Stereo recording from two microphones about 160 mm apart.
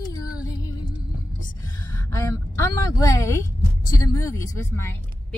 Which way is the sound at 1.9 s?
20° left (ahead or behind).